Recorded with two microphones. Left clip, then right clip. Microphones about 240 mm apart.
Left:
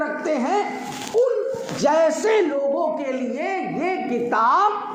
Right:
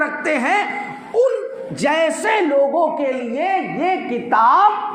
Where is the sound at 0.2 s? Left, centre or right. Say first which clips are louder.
Right 3 dB; right.